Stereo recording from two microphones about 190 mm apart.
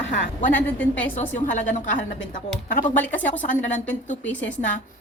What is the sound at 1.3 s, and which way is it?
A woman's voice, 40° left (ahead or behind).